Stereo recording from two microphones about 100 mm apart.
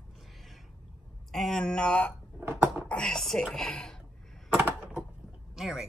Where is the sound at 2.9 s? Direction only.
10° left (ahead or behind).